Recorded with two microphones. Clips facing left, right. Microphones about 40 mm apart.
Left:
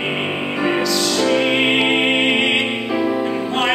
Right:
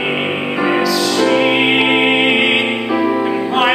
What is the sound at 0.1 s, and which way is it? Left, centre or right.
Music, centre.